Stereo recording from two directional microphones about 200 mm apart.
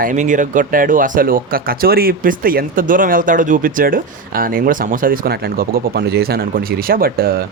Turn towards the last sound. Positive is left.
turn(degrees=-50)  # may be behind; listen again after turning